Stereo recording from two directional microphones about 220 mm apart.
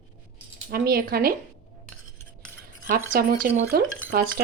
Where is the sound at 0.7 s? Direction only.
45° right (ahead or behind).